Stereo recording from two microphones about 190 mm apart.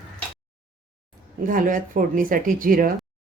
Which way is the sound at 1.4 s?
45° right (ahead or behind).